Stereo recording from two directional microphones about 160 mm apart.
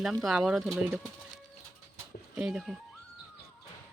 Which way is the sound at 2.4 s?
5° right (ahead or behind).